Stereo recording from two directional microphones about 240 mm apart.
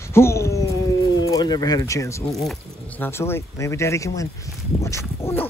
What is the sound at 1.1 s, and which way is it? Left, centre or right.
Speech, centre.